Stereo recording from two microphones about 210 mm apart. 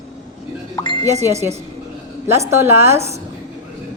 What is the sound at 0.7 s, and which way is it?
Music, 20° left (ahead or behind).